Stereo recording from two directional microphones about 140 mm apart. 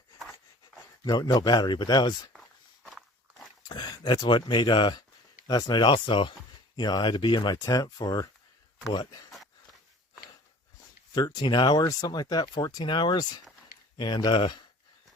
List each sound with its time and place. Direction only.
1.0 s speech: 30° left (ahead or behind)
2.3 s a sound: centre (ahead or behind)
3.7 s speech: 30° left (ahead or behind)
11.1 s speech: 30° left (ahead or behind)